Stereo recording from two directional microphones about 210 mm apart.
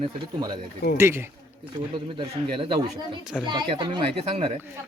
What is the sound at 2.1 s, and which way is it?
Speech, 25° right (ahead or behind).